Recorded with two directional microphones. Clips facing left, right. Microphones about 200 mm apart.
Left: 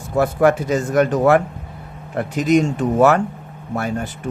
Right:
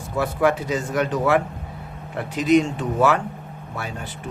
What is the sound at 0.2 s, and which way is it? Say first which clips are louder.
A man's voice: left 5 dB; 45° left (ahead or behind).